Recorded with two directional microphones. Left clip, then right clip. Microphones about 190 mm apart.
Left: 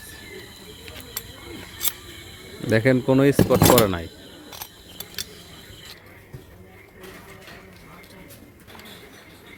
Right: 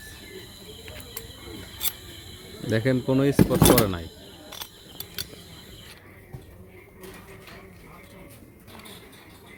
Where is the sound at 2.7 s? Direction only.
30° left (ahead or behind).